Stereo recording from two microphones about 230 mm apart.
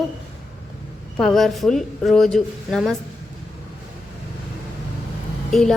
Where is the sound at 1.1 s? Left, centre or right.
Centre.